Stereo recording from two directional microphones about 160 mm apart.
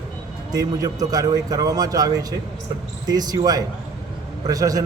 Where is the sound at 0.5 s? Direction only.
25° right (ahead or behind).